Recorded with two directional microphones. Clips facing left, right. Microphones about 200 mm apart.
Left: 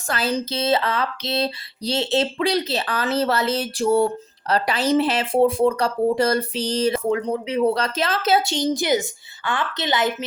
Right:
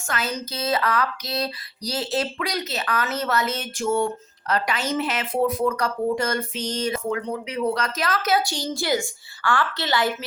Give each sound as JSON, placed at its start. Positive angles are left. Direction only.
{"t": 0.1, "sound": "a woman's voice", "side_deg": 30}